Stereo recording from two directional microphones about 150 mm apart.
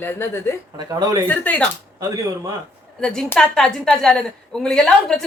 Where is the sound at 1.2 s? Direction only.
10° left (ahead or behind).